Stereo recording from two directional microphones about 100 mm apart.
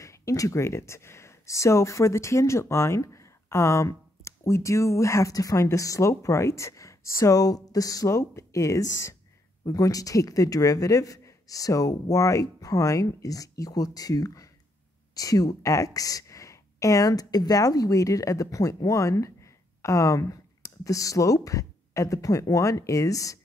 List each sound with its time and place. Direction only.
0.0 s speech: 30° left (ahead or behind)